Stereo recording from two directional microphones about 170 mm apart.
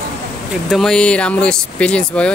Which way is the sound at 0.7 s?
Centre (ahead or behind).